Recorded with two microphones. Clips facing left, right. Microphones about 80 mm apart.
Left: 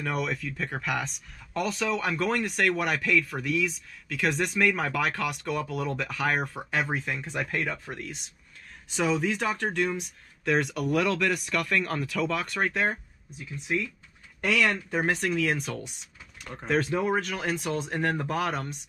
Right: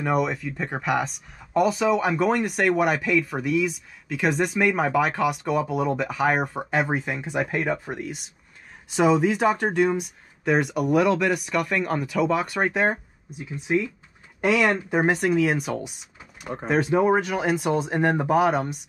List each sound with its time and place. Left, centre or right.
0.0 s speech: centre
0.8 s speech: centre; by 15.0 s right
15.0 s speech: centre